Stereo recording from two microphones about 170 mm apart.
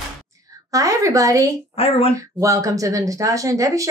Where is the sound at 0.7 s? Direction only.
20° right (ahead or behind).